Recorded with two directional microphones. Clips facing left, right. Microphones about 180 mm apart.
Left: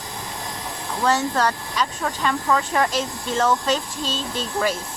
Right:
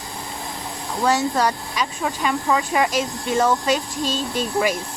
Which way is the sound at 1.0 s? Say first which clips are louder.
Right 1 dB; 10° right (ahead or behind).